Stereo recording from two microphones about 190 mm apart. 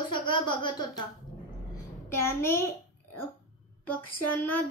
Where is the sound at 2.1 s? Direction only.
15° left (ahead or behind).